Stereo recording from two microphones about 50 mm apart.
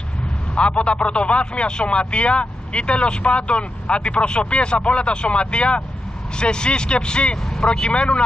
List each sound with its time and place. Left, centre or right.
0.6 s speech: left